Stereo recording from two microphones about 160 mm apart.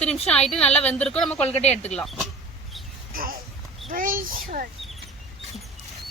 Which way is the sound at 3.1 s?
60° right (ahead or behind).